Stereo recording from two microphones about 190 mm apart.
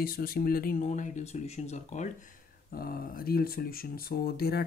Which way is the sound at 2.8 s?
50° left (ahead or behind).